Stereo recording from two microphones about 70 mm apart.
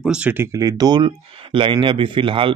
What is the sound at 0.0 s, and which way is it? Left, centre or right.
Speech, centre.